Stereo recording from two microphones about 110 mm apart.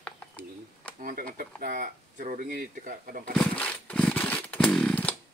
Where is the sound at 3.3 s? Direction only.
10° left (ahead or behind).